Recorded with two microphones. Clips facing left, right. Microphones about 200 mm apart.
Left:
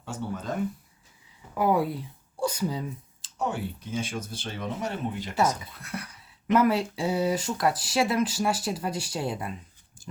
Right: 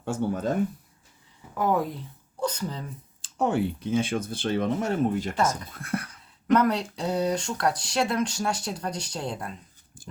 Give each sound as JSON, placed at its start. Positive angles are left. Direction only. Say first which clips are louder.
{"t": 0.0, "sound": "speech", "louder": "right 7 dB", "side_deg": -50}
{"t": 1.5, "sound": "speech", "louder": "left 1 dB", "side_deg": 10}
{"t": 3.2, "sound": "speech", "louder": "right 6 dB", "side_deg": -55}
{"t": 6.5, "sound": "speech", "louder": "even", "side_deg": 5}